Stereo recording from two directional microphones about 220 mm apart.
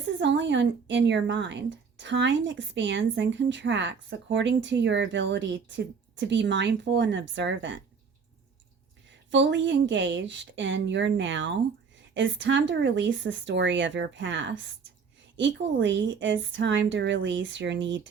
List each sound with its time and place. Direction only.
0.0 s speech: 55° right (ahead or behind)
9.3 s a woman's voice: 55° right (ahead or behind)